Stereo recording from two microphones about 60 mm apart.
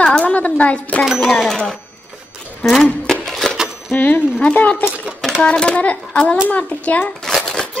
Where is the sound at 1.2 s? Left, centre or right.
Centre.